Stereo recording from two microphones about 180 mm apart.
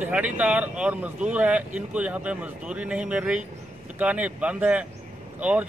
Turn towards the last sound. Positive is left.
turn(degrees=-10)  # may be behind; listen again after turning